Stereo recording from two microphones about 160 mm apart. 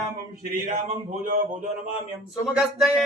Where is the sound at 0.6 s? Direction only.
55° right (ahead or behind).